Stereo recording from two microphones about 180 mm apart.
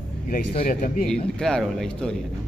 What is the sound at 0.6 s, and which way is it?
Speech, 50° left (ahead or behind).